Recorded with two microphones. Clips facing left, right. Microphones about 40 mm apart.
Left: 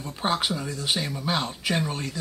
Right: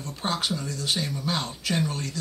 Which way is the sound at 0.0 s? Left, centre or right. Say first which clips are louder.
Left 3 dB; centre.